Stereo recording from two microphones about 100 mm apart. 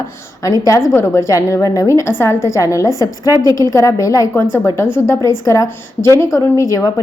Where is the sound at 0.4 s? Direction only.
35° left (ahead or behind).